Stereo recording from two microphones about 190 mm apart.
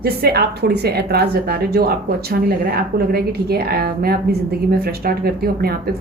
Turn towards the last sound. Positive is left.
turn(degrees=-55)  # may be behind; listen again after turning